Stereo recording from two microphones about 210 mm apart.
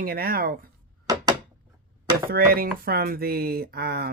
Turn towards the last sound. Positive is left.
turn(degrees=-50)  # may be behind; listen again after turning